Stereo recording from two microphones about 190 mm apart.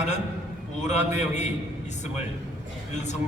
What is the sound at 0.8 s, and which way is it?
Speech, 40° left (ahead or behind).